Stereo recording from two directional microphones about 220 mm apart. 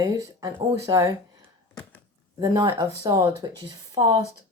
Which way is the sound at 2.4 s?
20° right (ahead or behind).